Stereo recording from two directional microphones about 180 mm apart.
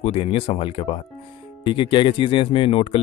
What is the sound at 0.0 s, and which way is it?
Speech, 30° left (ahead or behind).